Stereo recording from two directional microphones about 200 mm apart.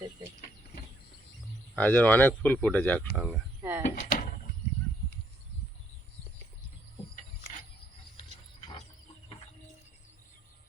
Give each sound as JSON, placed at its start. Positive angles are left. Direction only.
{"t": 1.7, "sound": "speech", "side_deg": 5}
{"t": 3.6, "sound": "a sound", "side_deg": -15}
{"t": 3.8, "sound": "door", "side_deg": 40}